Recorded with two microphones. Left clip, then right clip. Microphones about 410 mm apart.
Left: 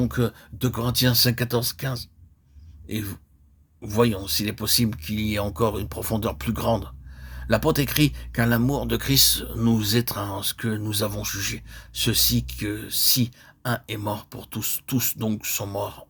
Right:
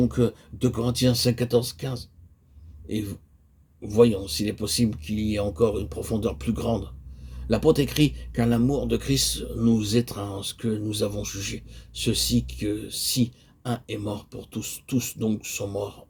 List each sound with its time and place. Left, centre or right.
0.0 s speech: left